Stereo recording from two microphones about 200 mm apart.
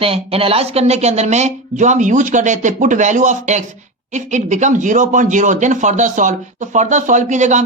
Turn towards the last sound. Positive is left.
turn(degrees=-35)  # may be behind; listen again after turning